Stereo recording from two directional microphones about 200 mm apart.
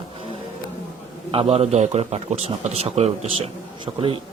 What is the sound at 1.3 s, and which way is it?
A man's voice, 30° right (ahead or behind).